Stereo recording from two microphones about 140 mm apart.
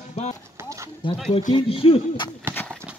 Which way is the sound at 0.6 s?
20° right (ahead or behind).